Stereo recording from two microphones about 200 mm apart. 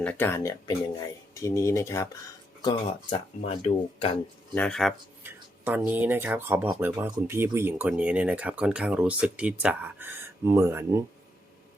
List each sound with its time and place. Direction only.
0.0 s speech: 10° left (ahead or behind); by 4.1 s 30° left (ahead or behind)
4.5 s speech: 5° left (ahead or behind)
5.2 s speech: 10° right (ahead or behind)